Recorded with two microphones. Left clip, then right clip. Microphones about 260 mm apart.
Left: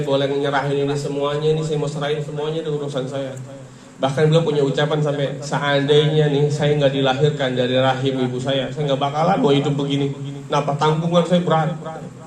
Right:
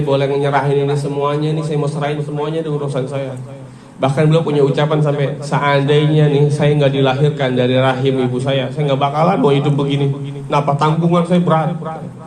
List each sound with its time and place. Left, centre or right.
0.1 s a man's voice: right